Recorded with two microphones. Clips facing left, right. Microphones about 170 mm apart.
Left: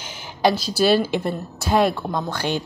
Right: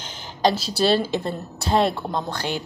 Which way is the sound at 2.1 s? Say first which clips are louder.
Left 1 dB; 20° right (ahead or behind).